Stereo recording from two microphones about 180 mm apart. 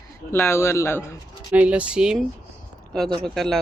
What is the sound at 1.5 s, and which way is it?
Speech, 5° right (ahead or behind).